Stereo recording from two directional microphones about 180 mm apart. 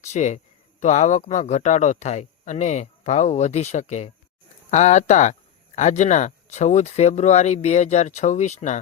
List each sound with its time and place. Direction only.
0.0 s speech: 40° left (ahead or behind)